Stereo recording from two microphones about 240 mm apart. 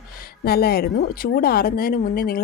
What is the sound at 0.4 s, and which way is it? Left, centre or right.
A woman's voice, left.